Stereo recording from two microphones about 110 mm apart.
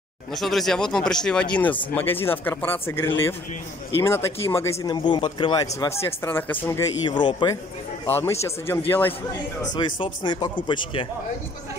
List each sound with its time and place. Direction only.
0.3 s speech: centre (ahead or behind); by 4.7 s 25° left (ahead or behind)
4.8 s speech: 40° left (ahead or behind)
5.8 s speech: 25° left (ahead or behind)
6.8 s a man's voice: 40° left (ahead or behind)
8.1 s speech: 25° left (ahead or behind)
9.8 s speech: 45° left (ahead or behind)